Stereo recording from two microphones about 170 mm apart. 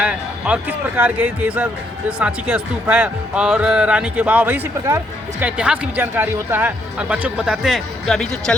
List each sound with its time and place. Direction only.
0.0 s a man's voice: 5° right (ahead or behind)